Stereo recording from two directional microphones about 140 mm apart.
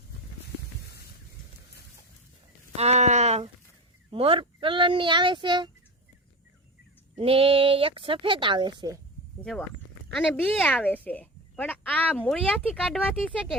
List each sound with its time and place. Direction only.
2.7 s speech: 50° right (ahead or behind)
4.1 s speech: 40° right (ahead or behind)
7.2 s speech: 40° right (ahead or behind)
9.4 s speech: 5° left (ahead or behind)
12.6 s speech: 5° right (ahead or behind)